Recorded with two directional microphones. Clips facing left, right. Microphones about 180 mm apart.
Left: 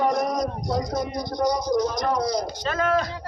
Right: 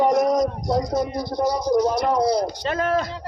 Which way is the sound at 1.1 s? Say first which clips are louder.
Right 1 dB; 5° right (ahead or behind).